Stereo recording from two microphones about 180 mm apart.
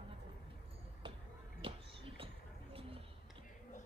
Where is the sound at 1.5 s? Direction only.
30° right (ahead or behind).